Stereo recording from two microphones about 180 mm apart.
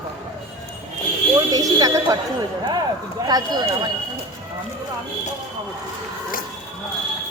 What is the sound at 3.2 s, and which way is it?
Speech, 20° right (ahead or behind).